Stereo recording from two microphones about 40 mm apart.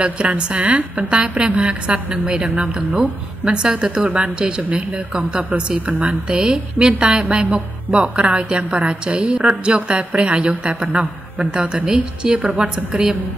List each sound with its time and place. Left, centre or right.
0.0 s a woman's voice: right
2.5 s a woman's voice: right
6.2 s a woman's voice: right
12.4 s a woman's voice: right